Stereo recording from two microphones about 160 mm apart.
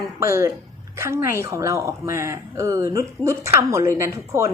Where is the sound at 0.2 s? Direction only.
15° right (ahead or behind).